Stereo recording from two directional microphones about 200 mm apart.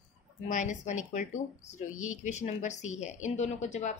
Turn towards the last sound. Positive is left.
turn(degrees=35)  # may be behind; listen again after turning